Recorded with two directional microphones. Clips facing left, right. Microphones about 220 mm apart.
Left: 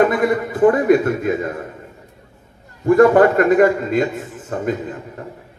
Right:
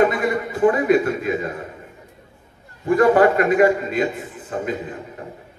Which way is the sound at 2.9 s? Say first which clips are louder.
Left 3 dB; 50° left (ahead or behind).